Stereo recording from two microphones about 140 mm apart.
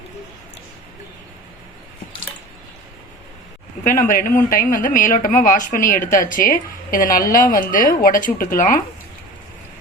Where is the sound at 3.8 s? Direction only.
75° left (ahead or behind).